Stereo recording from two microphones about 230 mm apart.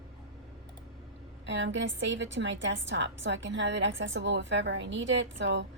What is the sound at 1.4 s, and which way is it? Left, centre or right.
A woman's voice, right.